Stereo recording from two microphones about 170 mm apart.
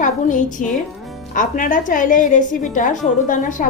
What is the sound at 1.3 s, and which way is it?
A woman's voice, 50° left (ahead or behind).